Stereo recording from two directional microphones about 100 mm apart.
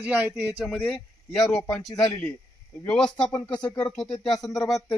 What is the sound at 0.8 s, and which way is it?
Speech, 10° left (ahead or behind).